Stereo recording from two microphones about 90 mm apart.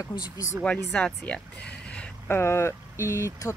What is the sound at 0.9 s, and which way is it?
Speech, 10° left (ahead or behind).